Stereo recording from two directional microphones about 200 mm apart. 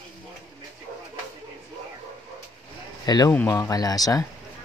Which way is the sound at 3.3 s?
15° left (ahead or behind).